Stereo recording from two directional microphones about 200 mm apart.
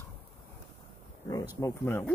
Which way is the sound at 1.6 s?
15° left (ahead or behind).